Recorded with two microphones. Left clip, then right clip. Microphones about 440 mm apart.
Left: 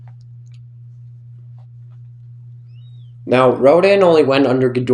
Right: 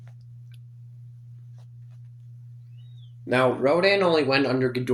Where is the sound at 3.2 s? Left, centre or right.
Right.